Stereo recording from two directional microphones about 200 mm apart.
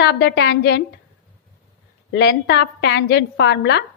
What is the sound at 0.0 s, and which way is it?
Speech, 55° left (ahead or behind).